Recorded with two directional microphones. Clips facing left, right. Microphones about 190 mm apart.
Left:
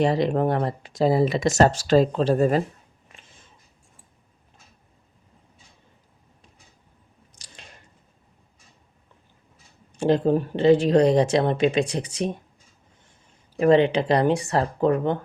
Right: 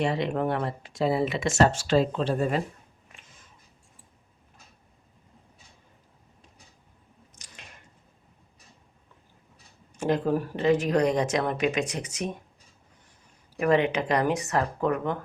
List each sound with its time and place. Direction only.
0.0 s speech: 40° left (ahead or behind)
3.2 s a sound: 30° left (ahead or behind)
7.3 s squish: 30° left (ahead or behind)
10.0 s speech: 30° left (ahead or behind)
13.6 s speech: 30° left (ahead or behind)